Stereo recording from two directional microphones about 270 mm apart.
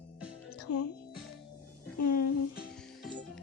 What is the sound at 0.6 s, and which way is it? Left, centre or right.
Music, left.